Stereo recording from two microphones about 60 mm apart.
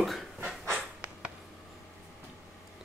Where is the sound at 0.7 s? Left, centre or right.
Centre.